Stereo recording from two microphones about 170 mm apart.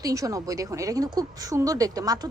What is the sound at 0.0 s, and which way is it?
Speech, 20° right (ahead or behind).